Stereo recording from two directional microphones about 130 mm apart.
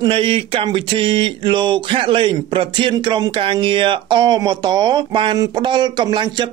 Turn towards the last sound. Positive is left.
turn(degrees=-40)  # may be behind; listen again after turning